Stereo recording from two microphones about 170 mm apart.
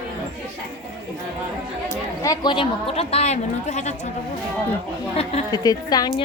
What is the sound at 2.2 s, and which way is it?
A woman's voice, 20° left (ahead or behind).